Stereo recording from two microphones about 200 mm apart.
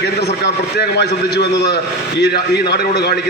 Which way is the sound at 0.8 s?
55° left (ahead or behind).